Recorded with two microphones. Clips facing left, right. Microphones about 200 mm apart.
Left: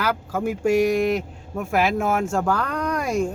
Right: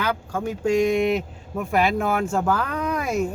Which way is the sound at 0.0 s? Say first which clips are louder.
Left 2 dB; 5° left (ahead or behind).